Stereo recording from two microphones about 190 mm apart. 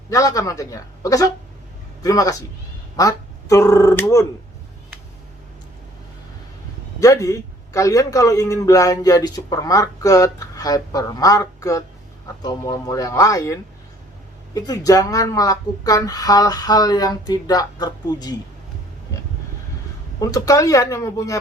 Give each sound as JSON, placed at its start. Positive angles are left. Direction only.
{"t": 0.1, "sound": "a man's voice", "side_deg": 15}
{"t": 7.0, "sound": "a man's voice", "side_deg": 15}
{"t": 20.1, "sound": "a man's voice", "side_deg": 20}